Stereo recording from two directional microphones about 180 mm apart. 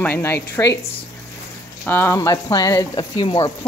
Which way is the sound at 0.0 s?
10° left (ahead or behind).